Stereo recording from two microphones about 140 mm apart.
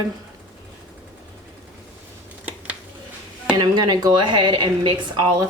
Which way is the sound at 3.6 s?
30° right (ahead or behind).